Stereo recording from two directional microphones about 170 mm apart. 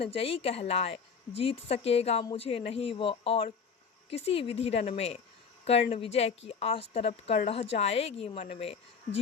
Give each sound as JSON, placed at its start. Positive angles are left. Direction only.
{"t": 0.0, "sound": "a woman's voice", "side_deg": 35}